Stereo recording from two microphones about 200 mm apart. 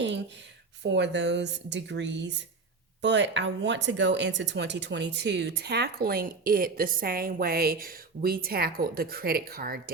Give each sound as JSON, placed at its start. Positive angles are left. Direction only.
{"t": 0.8, "sound": "speech", "side_deg": -60}